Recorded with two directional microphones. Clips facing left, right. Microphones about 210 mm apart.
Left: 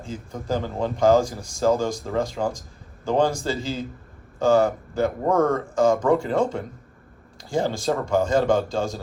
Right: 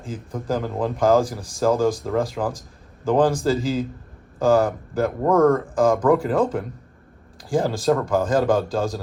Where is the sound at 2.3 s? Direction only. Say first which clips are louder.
Even; centre (ahead or behind).